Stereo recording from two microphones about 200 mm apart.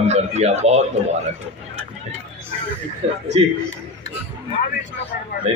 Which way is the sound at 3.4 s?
25° right (ahead or behind).